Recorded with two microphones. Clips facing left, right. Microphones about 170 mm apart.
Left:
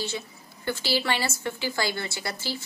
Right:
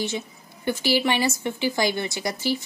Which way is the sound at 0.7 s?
15° right (ahead or behind).